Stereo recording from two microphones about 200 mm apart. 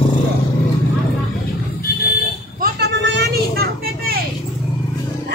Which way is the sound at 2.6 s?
50° right (ahead or behind).